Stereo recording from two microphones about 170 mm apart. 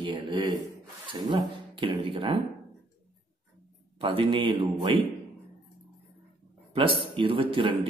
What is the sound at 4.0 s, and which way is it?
A man's voice, 30° right (ahead or behind).